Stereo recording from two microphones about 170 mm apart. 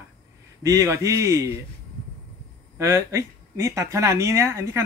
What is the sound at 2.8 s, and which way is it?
Speech, 15° right (ahead or behind).